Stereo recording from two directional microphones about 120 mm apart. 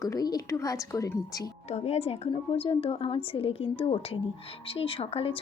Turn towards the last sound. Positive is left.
turn(degrees=55)  # may be behind; listen again after turning